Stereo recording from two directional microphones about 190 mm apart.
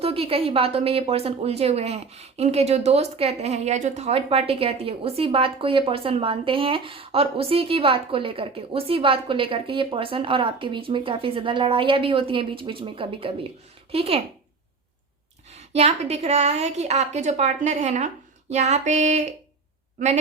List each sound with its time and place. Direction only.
0.0 s speech: 30° right (ahead or behind)
15.5 s a woman's voice: 35° right (ahead or behind)